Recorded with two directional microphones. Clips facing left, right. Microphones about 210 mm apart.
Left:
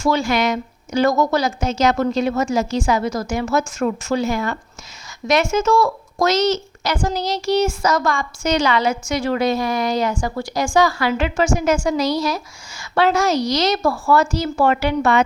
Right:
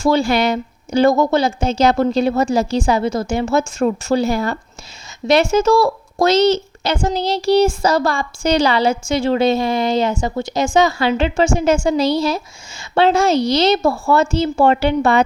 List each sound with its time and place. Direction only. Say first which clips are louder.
0.0 s a woman's voice: right 3 dB; 30° right (ahead or behind)